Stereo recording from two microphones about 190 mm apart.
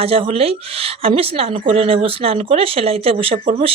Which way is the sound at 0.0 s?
30° right (ahead or behind).